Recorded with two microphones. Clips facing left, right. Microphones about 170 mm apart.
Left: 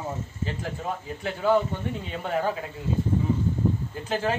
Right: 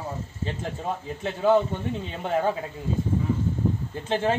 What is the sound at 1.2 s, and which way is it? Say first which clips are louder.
Speech: right 2 dB; 20° right (ahead or behind).